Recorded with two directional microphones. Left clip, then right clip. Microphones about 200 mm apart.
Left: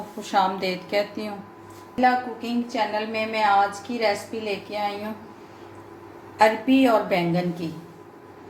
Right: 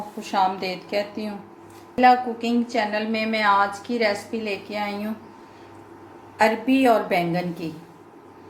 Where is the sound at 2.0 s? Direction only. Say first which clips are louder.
Right 4 dB; 30° right (ahead or behind).